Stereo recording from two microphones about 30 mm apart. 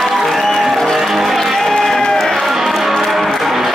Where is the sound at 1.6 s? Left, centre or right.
Centre.